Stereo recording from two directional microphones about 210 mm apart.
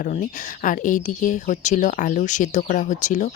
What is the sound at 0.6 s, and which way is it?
Speech, 40° left (ahead or behind).